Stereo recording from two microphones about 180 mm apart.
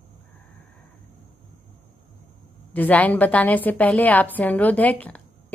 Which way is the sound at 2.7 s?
10° left (ahead or behind).